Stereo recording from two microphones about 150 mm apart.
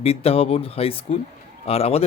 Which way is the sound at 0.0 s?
40° left (ahead or behind).